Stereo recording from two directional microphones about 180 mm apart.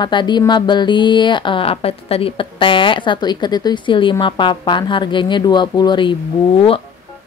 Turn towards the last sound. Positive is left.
turn(degrees=30)  # may be behind; listen again after turning